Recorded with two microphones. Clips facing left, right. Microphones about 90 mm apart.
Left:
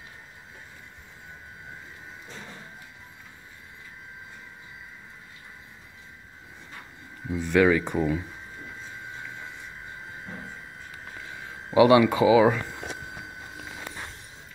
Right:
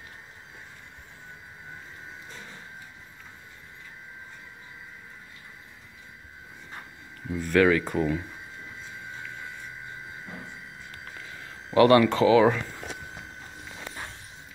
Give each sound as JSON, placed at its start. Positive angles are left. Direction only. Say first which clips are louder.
{"t": 7.2, "sound": "speech", "louder": "left 1 dB", "side_deg": 15}
{"t": 11.7, "sound": "speech", "louder": "left 1 dB", "side_deg": 10}